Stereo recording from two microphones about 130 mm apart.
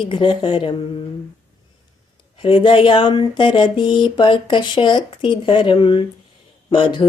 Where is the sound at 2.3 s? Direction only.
40° left (ahead or behind).